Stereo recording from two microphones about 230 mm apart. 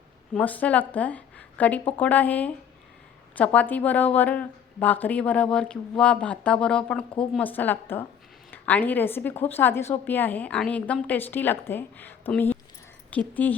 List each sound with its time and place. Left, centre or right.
0.3 s a woman's voice: centre